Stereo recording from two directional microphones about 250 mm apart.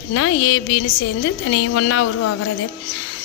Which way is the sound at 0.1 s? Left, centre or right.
Left.